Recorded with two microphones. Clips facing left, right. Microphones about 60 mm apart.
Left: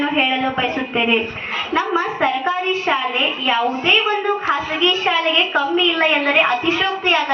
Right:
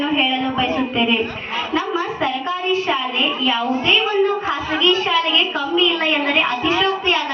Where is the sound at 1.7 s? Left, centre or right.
Left.